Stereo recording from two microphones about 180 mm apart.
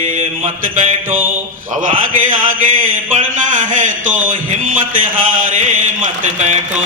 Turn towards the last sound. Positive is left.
turn(degrees=-40)  # may be behind; listen again after turning